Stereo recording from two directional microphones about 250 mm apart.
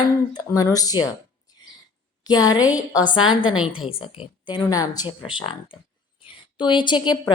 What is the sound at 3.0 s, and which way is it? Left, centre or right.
Speech, centre.